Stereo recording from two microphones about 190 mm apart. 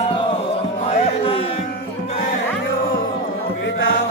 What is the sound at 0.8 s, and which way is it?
Music, 30° left (ahead or behind).